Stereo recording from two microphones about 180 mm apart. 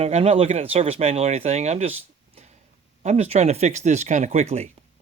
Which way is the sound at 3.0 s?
35° right (ahead or behind).